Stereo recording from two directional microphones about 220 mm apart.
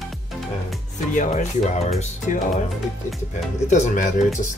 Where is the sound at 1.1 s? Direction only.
30° left (ahead or behind).